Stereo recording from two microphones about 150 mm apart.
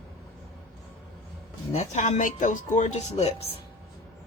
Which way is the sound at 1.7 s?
50° left (ahead or behind).